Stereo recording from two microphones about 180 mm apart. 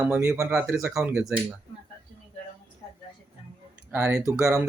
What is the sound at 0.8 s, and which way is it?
Speech, 15° right (ahead or behind).